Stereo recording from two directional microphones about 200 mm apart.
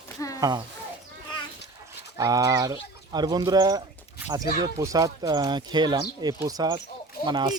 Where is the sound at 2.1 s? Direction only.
20° right (ahead or behind).